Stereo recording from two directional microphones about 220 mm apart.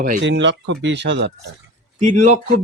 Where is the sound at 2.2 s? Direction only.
30° right (ahead or behind).